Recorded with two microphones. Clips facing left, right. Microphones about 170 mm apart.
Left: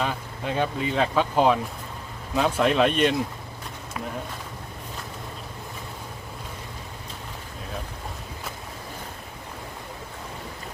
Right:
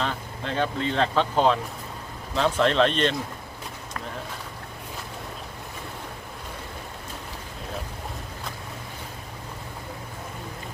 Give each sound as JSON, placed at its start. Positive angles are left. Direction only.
{"t": 0.0, "sound": "speech", "side_deg": 10}